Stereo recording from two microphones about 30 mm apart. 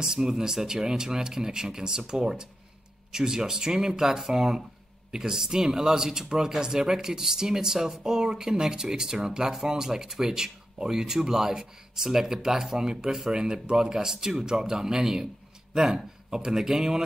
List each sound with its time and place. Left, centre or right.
0.0 s speech: centre